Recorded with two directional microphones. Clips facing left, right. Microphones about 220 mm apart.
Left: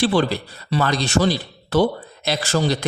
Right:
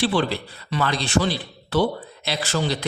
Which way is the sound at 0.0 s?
40° left (ahead or behind).